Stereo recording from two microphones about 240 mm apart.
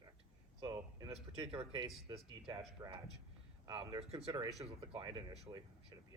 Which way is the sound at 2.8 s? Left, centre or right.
Centre.